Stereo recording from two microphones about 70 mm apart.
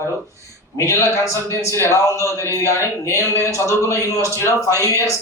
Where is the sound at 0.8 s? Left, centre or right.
Left.